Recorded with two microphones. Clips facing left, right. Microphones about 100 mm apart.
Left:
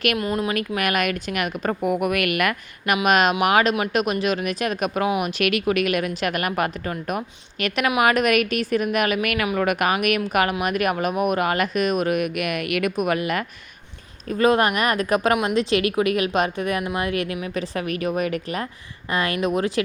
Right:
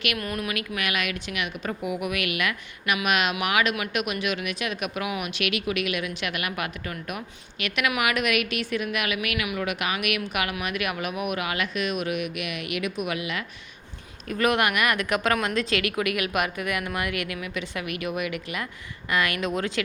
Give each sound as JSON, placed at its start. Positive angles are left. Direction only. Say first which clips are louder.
{"t": 0.2, "sound": "speech", "louder": "left 7 dB", "side_deg": 25}
{"t": 0.8, "sound": "a woman's voice", "louder": "left 7 dB", "side_deg": 45}
{"t": 14.3, "sound": "a woman's voice", "louder": "left 5 dB", "side_deg": 30}